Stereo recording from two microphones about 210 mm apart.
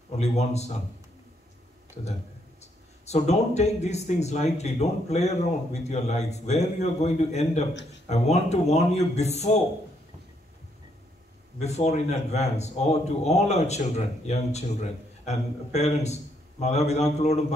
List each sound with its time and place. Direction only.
0.2 s speech: 30° left (ahead or behind)
2.6 s speech: 30° left (ahead or behind)
11.6 s speech: 30° left (ahead or behind)